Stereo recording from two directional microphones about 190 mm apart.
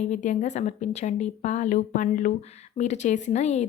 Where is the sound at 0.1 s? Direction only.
40° left (ahead or behind).